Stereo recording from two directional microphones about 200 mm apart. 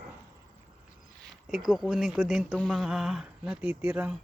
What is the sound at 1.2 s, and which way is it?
Speech, 5° right (ahead or behind).